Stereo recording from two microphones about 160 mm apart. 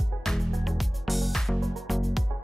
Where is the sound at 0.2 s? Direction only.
Centre (ahead or behind).